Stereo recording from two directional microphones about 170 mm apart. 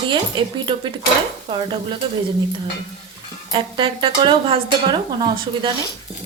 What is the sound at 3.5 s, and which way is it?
Speech, 30° right (ahead or behind).